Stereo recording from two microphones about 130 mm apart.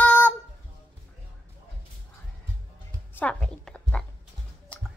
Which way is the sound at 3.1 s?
10° left (ahead or behind).